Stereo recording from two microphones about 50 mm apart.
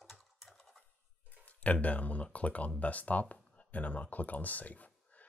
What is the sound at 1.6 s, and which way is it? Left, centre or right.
Speech, left.